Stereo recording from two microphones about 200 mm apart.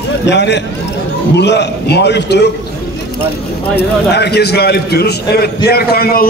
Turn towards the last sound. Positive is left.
turn(degrees=50)  # may be behind; listen again after turning